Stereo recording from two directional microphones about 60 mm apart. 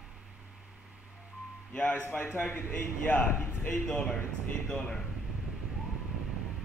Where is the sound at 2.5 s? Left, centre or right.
Left.